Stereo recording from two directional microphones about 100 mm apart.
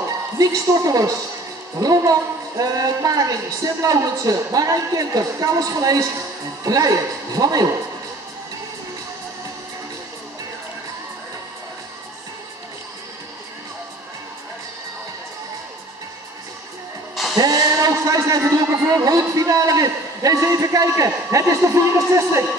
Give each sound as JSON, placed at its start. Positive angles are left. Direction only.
{"t": 0.4, "sound": "speech", "side_deg": -35}
{"t": 17.1, "sound": "music", "side_deg": 0}
{"t": 17.4, "sound": "a sound", "side_deg": -35}
{"t": 18.6, "sound": "speech", "side_deg": -30}